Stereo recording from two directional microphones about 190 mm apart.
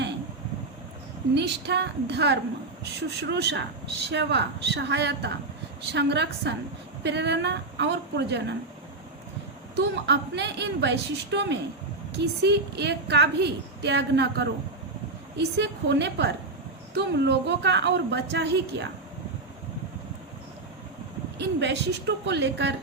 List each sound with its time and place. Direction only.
1.4 s a woman's voice: 65° right (ahead or behind)
9.7 s a woman's voice: 65° right (ahead or behind)
21.4 s a woman's voice: 65° right (ahead or behind)